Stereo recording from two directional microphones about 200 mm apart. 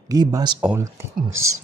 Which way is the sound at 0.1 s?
20° right (ahead or behind).